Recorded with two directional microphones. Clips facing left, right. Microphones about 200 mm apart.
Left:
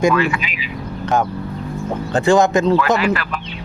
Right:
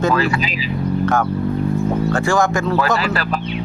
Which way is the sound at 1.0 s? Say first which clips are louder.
Left 1 dB; 15° left (ahead or behind).